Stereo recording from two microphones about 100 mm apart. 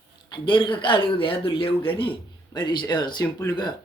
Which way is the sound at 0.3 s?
55° left (ahead or behind).